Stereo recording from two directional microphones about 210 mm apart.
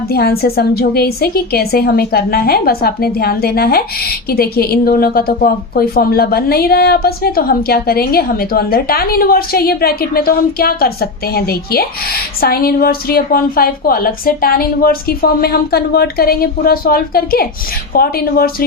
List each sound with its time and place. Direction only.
0.1 s a woman's voice: 50° left (ahead or behind)